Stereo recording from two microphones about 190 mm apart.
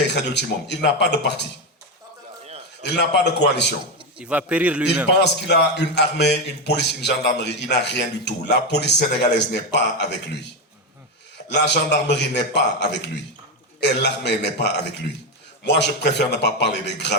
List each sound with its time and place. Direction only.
0.1 s a man's voice: 65° left (ahead or behind)
2.8 s a man's voice: 65° left (ahead or behind)
4.2 s a man's voice: 5° right (ahead or behind)
5.0 s a man's voice: 65° left (ahead or behind)